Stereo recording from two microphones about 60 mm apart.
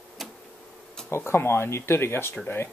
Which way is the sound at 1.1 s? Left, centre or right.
Left.